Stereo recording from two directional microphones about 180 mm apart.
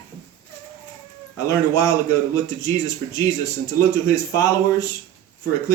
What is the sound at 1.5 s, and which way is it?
A man's voice, 20° left (ahead or behind).